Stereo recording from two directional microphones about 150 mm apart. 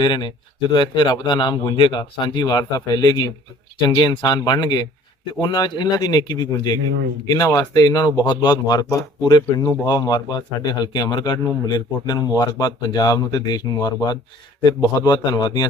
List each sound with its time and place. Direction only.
0.0 s speech: 30° left (ahead or behind)